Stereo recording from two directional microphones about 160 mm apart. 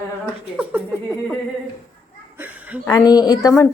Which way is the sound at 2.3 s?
10° right (ahead or behind).